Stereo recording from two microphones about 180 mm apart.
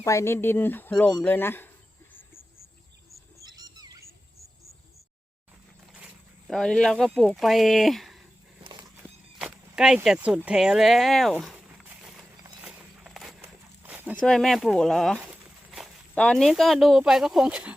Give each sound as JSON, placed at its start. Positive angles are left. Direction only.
{"t": 0.0, "sound": "speech", "side_deg": 15}
{"t": 3.4, "sound": "bird", "side_deg": -20}
{"t": 6.5, "sound": "speech", "side_deg": 5}
{"t": 9.0, "sound": "a sound", "side_deg": -5}
{"t": 12.6, "sound": "walk", "side_deg": -10}
{"t": 14.2, "sound": "speech", "side_deg": 5}